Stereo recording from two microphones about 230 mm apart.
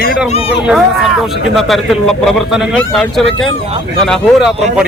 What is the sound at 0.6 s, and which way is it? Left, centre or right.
Speech, centre.